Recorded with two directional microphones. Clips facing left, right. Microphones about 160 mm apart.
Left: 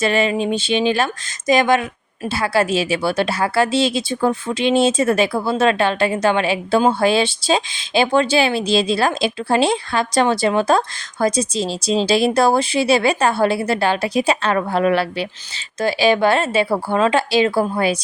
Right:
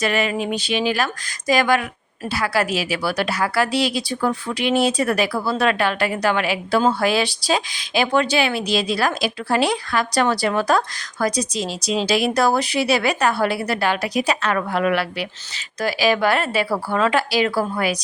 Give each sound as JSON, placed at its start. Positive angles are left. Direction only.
{"t": 0.0, "sound": "speech", "side_deg": 25}